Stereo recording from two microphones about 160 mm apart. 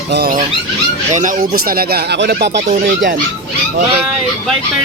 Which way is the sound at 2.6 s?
50° right (ahead or behind).